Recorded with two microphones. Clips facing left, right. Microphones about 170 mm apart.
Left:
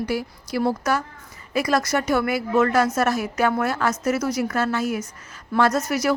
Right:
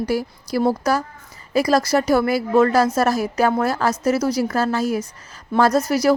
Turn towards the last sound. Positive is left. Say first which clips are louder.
# right 4 dB
turn(degrees=-35)  # may be behind; listen again after turning